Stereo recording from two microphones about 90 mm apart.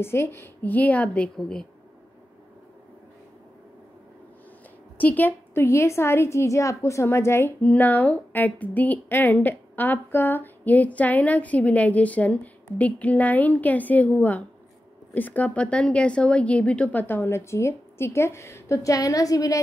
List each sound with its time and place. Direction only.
0.0 s a woman's voice: 25° left (ahead or behind); by 1.7 s 5° left (ahead or behind)
4.9 s a woman's voice: 20° left (ahead or behind)
7.6 s a woman's voice: 15° left (ahead or behind)
17.0 s a woman's voice: 25° left (ahead or behind); by 19.6 s 40° left (ahead or behind)